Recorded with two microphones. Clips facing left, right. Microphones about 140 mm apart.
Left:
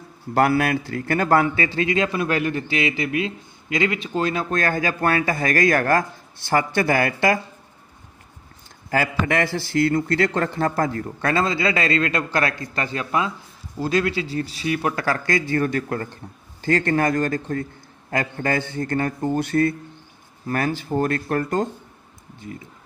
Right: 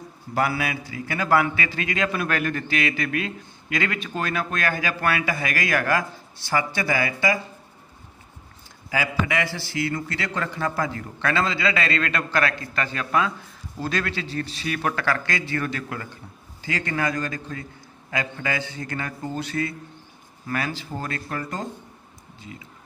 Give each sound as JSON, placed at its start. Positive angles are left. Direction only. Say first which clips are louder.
{"t": 0.3, "sound": "a man's voice", "louder": "left 6 dB", "side_deg": 55}
{"t": 1.4, "sound": "speech", "louder": "left 4 dB", "side_deg": 35}
{"t": 1.8, "sound": "a man's voice", "louder": "left 4 dB", "side_deg": 25}
{"t": 4.6, "sound": "a man's voice", "louder": "left 4 dB", "side_deg": 40}
{"t": 8.9, "sound": "a man's voice", "louder": "left 3 dB", "side_deg": 50}
{"t": 15.2, "sound": "a man's voice", "louder": "left 6 dB", "side_deg": 40}